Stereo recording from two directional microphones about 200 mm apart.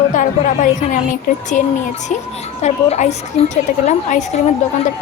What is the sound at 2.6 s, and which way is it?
A woman's voice, 35° left (ahead or behind).